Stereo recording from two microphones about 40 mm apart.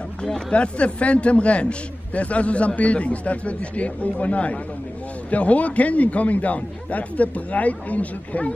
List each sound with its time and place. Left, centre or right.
0.5 s a man's voice: left